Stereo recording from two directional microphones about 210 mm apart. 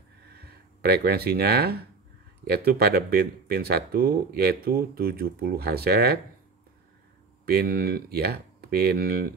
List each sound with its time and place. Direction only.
0.3 s speech: 50° right (ahead or behind)
7.4 s speech: 45° right (ahead or behind)